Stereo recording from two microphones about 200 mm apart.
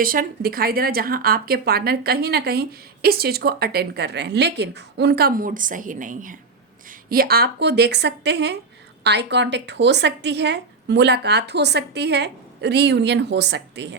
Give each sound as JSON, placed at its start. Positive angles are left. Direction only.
{"t": 0.0, "sound": "a woman's voice", "side_deg": -45}